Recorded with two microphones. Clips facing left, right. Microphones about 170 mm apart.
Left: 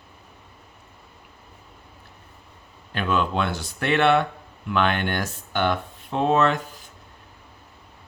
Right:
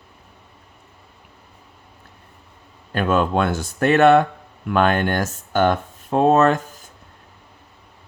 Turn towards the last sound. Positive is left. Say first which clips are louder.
# right 5 dB
turn(degrees=-45)  # may be behind; listen again after turning